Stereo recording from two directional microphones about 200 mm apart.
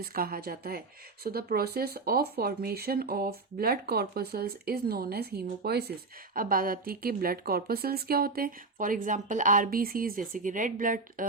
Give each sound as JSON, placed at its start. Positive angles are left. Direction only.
{"t": 0.0, "sound": "speech", "side_deg": -50}